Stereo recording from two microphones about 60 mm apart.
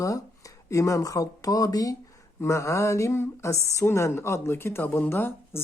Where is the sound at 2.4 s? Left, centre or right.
Left.